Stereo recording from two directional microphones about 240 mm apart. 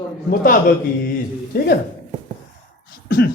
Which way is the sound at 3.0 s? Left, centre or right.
Left.